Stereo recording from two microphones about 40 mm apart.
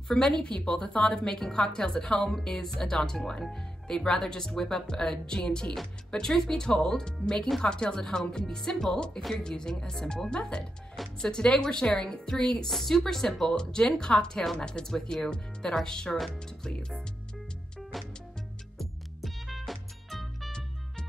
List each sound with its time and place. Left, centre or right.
0.1 s a woman's voice: centre
12.6 s speech: centre
13.5 s a woman's voice: left
17.9 s music: centre
19.2 s music: centre